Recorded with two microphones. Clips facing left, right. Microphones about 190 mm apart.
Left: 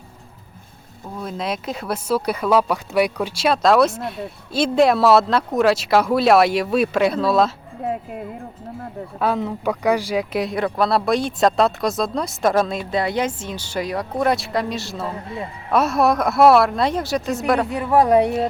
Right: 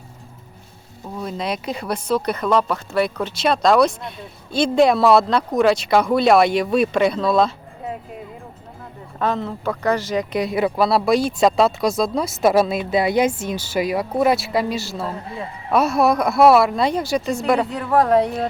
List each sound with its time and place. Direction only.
1.2 s speech: centre (ahead or behind)
9.1 s speech: 10° left (ahead or behind)
17.7 s speech: 15° left (ahead or behind)